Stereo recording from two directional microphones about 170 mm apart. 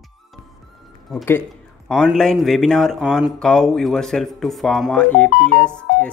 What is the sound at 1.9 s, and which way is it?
Speech, 5° left (ahead or behind).